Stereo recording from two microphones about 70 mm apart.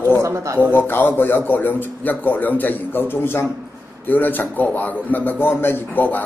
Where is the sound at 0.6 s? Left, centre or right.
Left.